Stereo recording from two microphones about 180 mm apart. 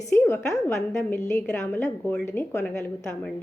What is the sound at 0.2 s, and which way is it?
A woman's voice, 15° left (ahead or behind).